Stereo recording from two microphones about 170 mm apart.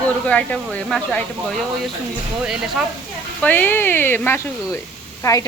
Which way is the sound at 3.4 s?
10° left (ahead or behind).